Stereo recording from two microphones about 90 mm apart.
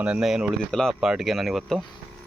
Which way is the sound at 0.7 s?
5° left (ahead or behind).